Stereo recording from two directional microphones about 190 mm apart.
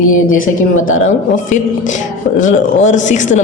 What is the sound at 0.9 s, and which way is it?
Speech, 40° left (ahead or behind).